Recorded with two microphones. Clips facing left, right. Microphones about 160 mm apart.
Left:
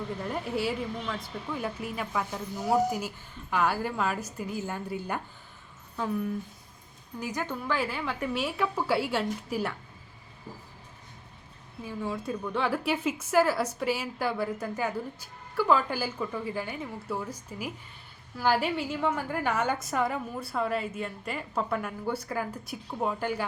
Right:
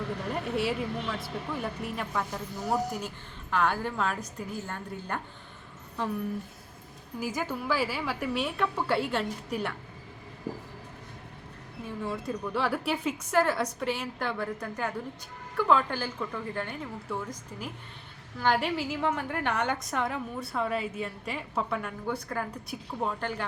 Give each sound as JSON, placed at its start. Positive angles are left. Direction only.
{"t": 0.2, "sound": "a woman's voice", "side_deg": 0}
{"t": 7.2, "sound": "a woman's voice", "side_deg": -5}
{"t": 10.5, "sound": "vehicle", "side_deg": -80}
{"t": 11.8, "sound": "a woman's voice", "side_deg": 0}